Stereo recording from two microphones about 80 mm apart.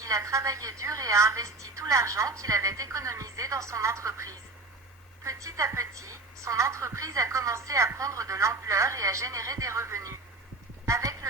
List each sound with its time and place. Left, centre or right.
0.0 s a woman's voice: right